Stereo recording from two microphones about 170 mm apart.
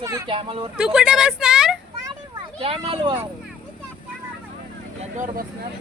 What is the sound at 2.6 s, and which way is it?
Speech, 35° right (ahead or behind).